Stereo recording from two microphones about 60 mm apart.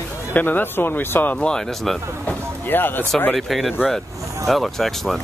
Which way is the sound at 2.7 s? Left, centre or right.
Left.